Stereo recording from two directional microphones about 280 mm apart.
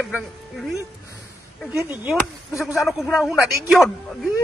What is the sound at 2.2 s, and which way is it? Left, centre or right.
Speech, centre.